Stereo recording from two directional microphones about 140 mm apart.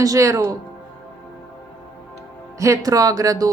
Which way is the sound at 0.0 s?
25° right (ahead or behind).